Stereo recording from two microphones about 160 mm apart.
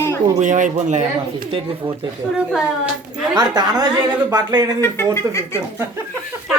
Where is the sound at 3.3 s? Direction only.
25° right (ahead or behind).